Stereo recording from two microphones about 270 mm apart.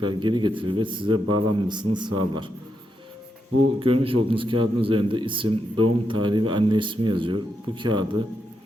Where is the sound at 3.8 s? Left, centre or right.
Centre.